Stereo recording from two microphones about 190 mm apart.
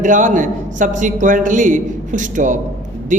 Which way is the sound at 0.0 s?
45° right (ahead or behind).